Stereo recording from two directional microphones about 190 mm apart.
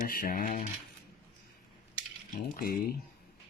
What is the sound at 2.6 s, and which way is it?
Speech, 55° left (ahead or behind).